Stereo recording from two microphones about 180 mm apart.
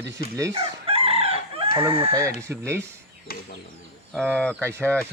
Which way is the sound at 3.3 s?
55° left (ahead or behind).